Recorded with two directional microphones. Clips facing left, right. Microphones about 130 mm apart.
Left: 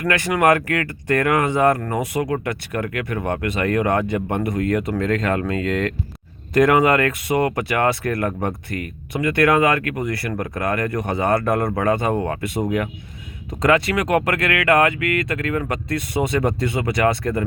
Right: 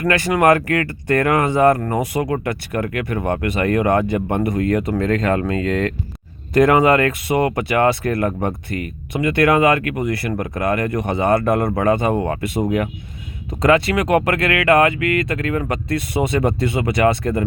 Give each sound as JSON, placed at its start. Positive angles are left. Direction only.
{"t": 0.0, "sound": "speech", "side_deg": -30}